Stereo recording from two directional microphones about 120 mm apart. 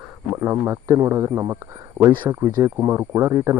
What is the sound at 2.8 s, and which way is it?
Speech, 20° right (ahead or behind).